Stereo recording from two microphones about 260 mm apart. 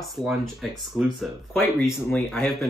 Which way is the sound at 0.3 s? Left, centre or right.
Centre.